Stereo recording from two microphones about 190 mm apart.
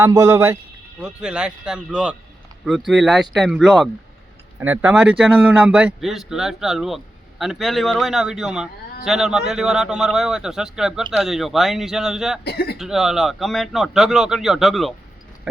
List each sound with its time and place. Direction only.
0.0 s speech: 15° right (ahead or behind)
12.5 s speech: 55° left (ahead or behind)
12.7 s speech: centre (ahead or behind)